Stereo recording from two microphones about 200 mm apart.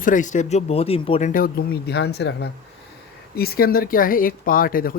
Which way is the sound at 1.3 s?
45° left (ahead or behind).